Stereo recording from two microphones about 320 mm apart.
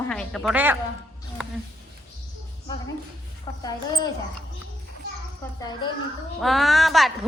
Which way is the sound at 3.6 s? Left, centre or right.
Centre.